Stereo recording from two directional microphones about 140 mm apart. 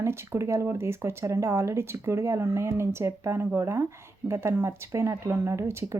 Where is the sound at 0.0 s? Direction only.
20° right (ahead or behind).